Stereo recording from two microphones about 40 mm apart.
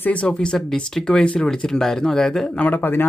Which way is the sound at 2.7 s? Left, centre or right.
Left.